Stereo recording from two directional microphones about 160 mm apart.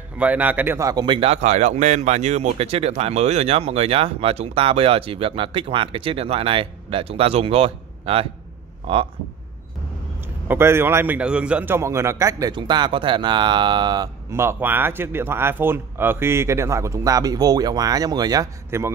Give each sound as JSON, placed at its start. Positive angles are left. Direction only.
{"t": 0.2, "sound": "a man's voice", "side_deg": -10}
{"t": 10.5, "sound": "a man's voice", "side_deg": -15}